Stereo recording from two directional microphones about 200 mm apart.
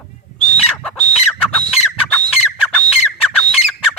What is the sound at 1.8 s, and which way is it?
Chicken, 35° left (ahead or behind).